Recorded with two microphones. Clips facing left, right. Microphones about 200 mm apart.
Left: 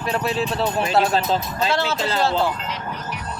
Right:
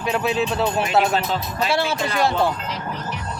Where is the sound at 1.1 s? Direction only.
25° left (ahead or behind).